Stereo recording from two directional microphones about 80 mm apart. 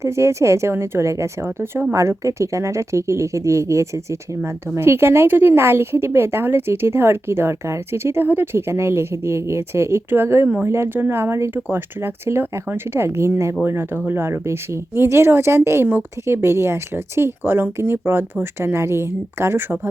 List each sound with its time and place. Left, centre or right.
0.0 s a woman's voice: right